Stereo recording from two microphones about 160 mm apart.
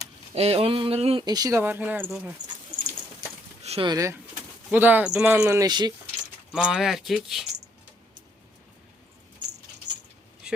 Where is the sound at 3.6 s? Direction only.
40° right (ahead or behind).